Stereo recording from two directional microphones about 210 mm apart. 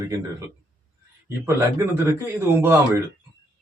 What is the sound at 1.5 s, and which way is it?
Speech, 10° right (ahead or behind).